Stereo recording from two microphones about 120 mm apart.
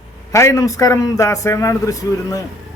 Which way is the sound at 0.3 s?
25° left (ahead or behind).